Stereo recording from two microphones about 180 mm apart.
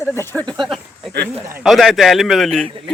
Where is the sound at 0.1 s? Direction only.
10° left (ahead or behind).